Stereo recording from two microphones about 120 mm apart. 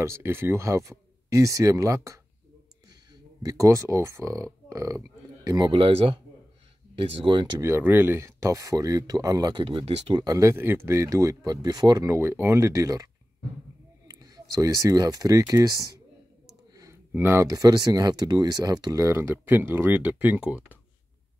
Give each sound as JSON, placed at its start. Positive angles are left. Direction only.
{"t": 0.0, "sound": "speech", "side_deg": -20}
{"t": 3.4, "sound": "speech", "side_deg": -25}
{"t": 4.6, "sound": "a sound", "side_deg": -25}
{"t": 5.7, "sound": "speech", "side_deg": -50}
{"t": 7.6, "sound": "speech", "side_deg": -20}
{"t": 9.7, "sound": "speech", "side_deg": -55}
{"t": 10.1, "sound": "speech", "side_deg": -30}
{"t": 12.1, "sound": "speech", "side_deg": -20}
{"t": 16.7, "sound": "clicking", "side_deg": -30}
{"t": 17.1, "sound": "speech", "side_deg": -20}